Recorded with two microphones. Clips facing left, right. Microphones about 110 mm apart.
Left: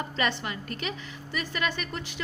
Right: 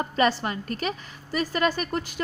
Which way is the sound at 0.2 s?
35° right (ahead or behind).